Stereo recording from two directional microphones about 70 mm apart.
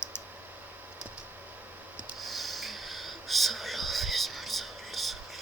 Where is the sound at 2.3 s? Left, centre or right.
Centre.